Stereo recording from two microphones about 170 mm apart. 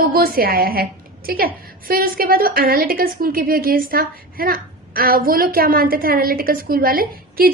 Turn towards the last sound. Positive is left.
turn(degrees=-60)  # may be behind; listen again after turning